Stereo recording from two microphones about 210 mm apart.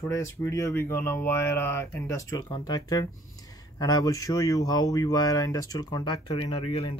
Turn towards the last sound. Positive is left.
turn(degrees=30)  # may be behind; listen again after turning